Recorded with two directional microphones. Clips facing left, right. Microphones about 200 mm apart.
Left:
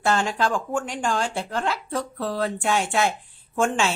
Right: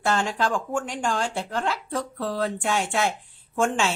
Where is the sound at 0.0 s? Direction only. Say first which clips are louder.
Left 2 dB; 5° left (ahead or behind).